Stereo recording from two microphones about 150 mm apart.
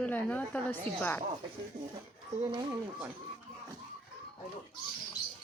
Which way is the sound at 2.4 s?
30° right (ahead or behind).